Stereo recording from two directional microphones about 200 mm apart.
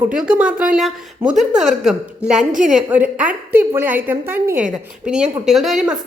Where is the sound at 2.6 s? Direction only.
5° right (ahead or behind).